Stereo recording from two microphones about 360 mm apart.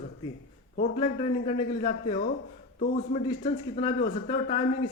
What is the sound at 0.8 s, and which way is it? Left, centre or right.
A man's voice, centre.